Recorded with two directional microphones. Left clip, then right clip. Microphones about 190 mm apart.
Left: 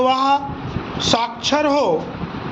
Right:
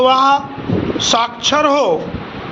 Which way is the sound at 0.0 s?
10° left (ahead or behind).